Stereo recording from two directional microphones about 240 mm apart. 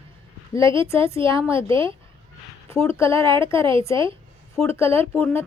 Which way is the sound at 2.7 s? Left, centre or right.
Centre.